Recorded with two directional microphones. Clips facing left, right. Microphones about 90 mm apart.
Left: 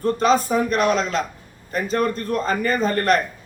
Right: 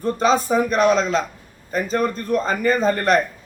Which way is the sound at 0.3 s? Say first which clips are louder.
Right 1 dB; 15° right (ahead or behind).